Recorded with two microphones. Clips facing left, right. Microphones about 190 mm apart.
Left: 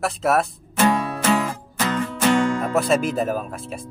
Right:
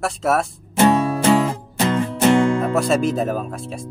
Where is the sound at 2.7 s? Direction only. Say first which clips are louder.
Right 1 dB; centre (ahead or behind).